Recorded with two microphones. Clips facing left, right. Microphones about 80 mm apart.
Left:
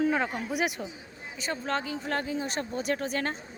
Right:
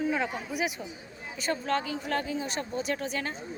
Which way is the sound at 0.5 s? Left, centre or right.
Left.